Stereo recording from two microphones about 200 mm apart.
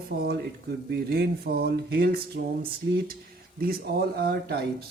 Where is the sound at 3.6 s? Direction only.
50° right (ahead or behind).